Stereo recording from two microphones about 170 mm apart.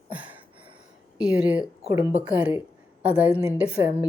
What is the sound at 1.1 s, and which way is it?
A woman's voice, 5° right (ahead or behind).